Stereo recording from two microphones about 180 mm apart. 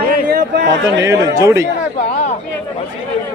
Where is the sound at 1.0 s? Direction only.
15° right (ahead or behind).